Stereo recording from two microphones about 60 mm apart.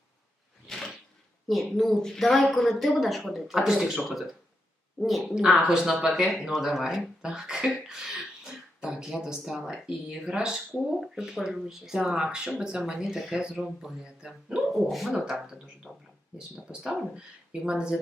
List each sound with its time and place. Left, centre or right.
1.5 s a woman's voice: centre
5.4 s a woman's voice: centre
7.0 s a woman's voice: centre
9.6 s speech: centre
14.7 s a woman's voice: centre
15.1 s speech: centre